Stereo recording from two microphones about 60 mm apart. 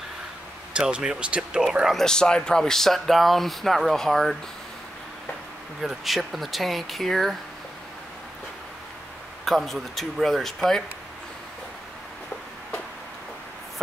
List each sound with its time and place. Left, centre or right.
0.7 s speech: centre
2.0 s speech: centre
5.8 s speech: centre
9.4 s speech: centre